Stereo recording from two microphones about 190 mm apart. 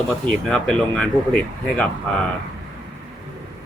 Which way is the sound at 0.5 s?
5° left (ahead or behind).